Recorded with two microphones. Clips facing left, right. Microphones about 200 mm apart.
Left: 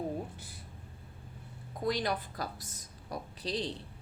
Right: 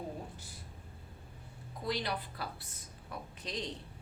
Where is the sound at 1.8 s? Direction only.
45° left (ahead or behind).